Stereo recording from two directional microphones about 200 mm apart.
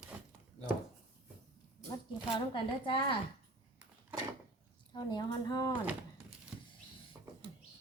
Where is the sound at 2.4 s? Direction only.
25° left (ahead or behind).